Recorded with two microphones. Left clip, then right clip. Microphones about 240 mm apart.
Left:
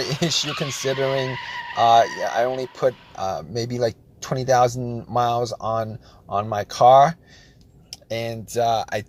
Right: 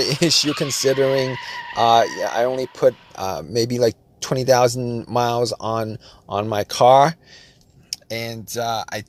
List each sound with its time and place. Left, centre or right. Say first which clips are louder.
0.0 s speech: right 5 dB; centre
1.7 s speech: even; right
7.9 s speech: even; centre